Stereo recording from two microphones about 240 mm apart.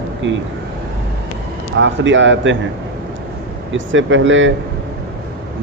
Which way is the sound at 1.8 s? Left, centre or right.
Right.